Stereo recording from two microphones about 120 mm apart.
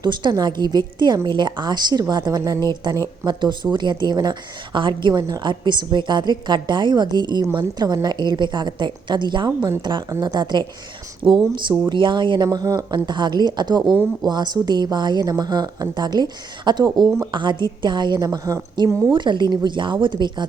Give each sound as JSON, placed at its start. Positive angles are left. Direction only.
{"t": 0.0, "sound": "a woman's voice", "side_deg": -40}
{"t": 11.2, "sound": "speech", "side_deg": -15}
{"t": 11.9, "sound": "a woman's voice", "side_deg": -40}
{"t": 12.5, "sound": "a woman's voice", "side_deg": -30}
{"t": 13.8, "sound": "speech", "side_deg": 0}
{"t": 14.3, "sound": "a woman's voice", "side_deg": -35}
{"t": 19.1, "sound": "a woman's voice", "side_deg": -40}